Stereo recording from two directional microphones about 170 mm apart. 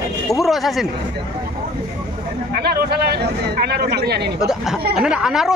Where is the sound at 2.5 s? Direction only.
70° right (ahead or behind).